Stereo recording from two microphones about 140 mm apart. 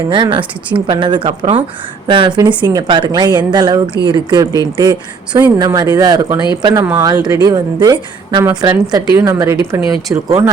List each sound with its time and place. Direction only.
0.1 s a woman's voice: 35° right (ahead or behind)